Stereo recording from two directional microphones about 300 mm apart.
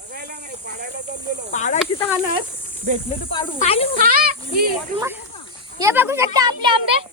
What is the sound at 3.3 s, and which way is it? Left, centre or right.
Speech, centre.